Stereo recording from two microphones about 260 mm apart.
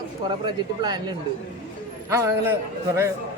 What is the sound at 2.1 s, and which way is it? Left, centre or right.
Speech, centre.